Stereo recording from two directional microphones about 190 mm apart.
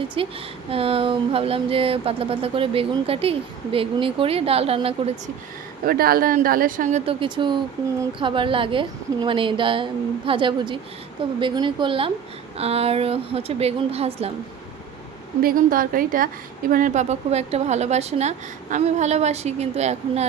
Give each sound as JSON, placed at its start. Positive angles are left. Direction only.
{"t": 0.2, "sound": "speech", "side_deg": -30}
{"t": 5.8, "sound": "speech", "side_deg": -50}
{"t": 7.0, "sound": "a woman's voice", "side_deg": -30}
{"t": 15.4, "sound": "a woman's voice", "side_deg": -50}